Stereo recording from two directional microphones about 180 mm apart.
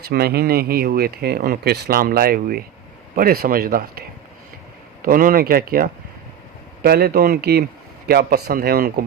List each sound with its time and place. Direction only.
0.0 s speech: 60° right (ahead or behind)
5.0 s speech: 55° right (ahead or behind)